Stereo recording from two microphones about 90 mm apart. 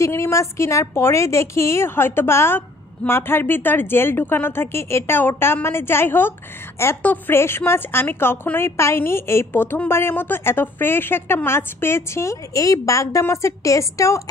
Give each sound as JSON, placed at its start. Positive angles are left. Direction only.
{"t": 0.0, "sound": "a woman's voice", "side_deg": 30}